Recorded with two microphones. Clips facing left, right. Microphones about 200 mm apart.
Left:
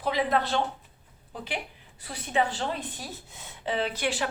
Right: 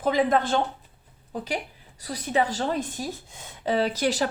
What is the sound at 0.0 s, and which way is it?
A woman's voice, 45° right (ahead or behind).